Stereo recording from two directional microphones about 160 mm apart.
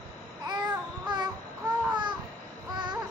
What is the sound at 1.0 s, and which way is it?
Babbling, 25° right (ahead or behind).